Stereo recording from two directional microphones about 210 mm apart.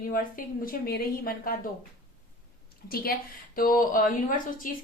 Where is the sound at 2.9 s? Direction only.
45° left (ahead or behind).